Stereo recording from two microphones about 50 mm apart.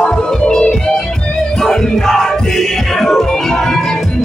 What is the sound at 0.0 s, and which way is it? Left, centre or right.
Music, centre.